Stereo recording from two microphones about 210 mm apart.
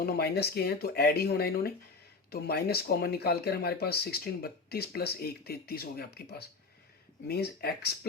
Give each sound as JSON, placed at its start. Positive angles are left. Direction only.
{"t": 0.0, "sound": "speech", "side_deg": 50}